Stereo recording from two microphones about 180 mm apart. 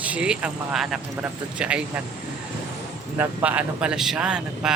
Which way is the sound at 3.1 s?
10° right (ahead or behind).